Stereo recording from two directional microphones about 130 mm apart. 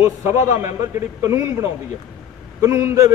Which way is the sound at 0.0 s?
20° right (ahead or behind).